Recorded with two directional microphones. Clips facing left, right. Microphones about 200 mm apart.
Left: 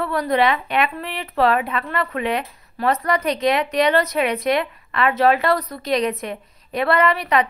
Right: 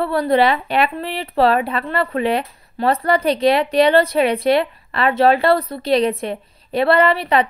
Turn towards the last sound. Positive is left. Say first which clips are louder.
# right 3 dB
turn(degrees=-30)  # may be behind; listen again after turning